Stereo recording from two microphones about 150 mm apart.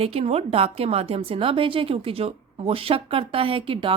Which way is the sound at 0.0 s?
40° right (ahead or behind).